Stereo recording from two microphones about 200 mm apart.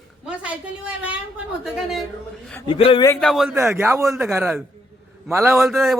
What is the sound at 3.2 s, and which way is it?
Speech, centre (ahead or behind).